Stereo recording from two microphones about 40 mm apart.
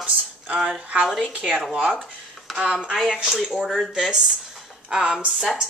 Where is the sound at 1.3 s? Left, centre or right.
Right.